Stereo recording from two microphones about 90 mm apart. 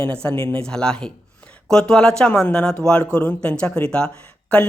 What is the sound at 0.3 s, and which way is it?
Speech, 75° right (ahead or behind).